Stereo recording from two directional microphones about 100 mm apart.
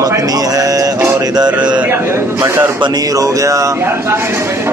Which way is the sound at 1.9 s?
25° right (ahead or behind).